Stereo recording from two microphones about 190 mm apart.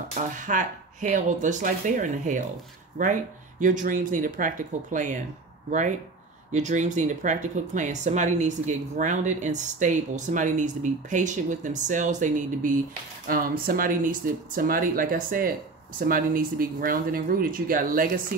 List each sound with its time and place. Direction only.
0.2 s speech: 45° right (ahead or behind)